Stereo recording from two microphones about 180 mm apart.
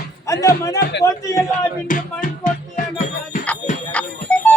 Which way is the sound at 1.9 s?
45° left (ahead or behind).